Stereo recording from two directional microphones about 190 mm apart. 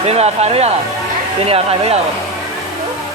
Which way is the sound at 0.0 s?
35° right (ahead or behind).